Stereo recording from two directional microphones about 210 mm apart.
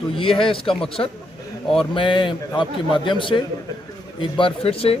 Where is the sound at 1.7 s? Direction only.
25° left (ahead or behind).